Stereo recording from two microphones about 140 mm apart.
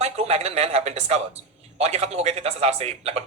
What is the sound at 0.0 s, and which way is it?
A man's voice, 50° right (ahead or behind).